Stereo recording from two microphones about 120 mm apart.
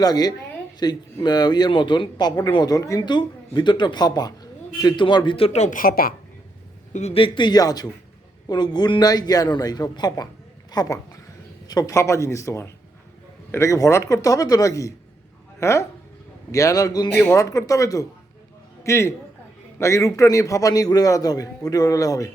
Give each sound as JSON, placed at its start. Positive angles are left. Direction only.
{"t": 0.0, "sound": "a man's voice", "side_deg": 35}
{"t": 5.5, "sound": "speech", "side_deg": 80}
{"t": 7.1, "sound": "a man's voice", "side_deg": 45}
{"t": 17.1, "sound": "a man's voice", "side_deg": 20}